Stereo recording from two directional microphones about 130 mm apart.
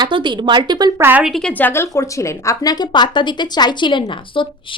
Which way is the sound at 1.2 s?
5° left (ahead or behind).